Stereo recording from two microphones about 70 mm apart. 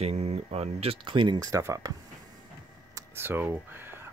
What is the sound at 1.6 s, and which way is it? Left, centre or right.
Speech, right.